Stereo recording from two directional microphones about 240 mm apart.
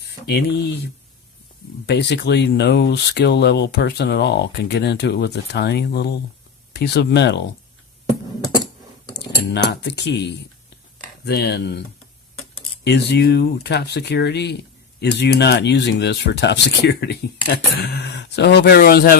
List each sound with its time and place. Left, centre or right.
0.3 s speech: left
1.9 s speech: left
9.1 s speech: left
12.8 s speech: left